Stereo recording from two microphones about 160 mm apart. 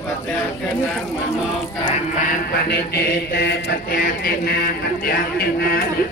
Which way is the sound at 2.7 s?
90° left.